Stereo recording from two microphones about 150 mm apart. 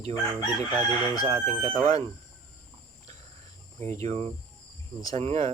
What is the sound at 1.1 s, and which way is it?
Chicken, 25° left (ahead or behind).